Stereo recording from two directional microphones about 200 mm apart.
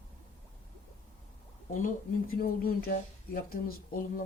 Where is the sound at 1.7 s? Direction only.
40° left (ahead or behind).